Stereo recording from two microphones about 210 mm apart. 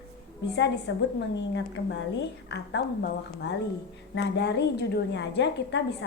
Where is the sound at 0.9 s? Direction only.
60° left (ahead or behind).